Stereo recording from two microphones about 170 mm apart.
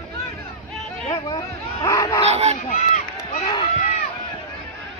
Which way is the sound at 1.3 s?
25° left (ahead or behind).